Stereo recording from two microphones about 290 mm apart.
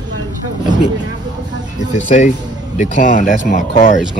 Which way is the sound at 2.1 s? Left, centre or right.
Left.